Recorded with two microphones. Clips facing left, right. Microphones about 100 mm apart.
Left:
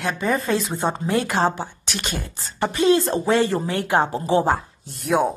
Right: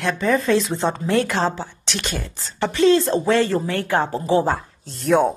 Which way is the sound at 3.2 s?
15° left (ahead or behind).